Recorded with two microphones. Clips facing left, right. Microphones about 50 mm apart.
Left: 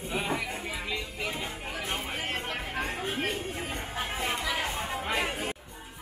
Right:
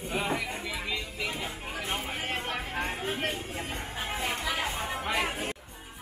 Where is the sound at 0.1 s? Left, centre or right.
Right.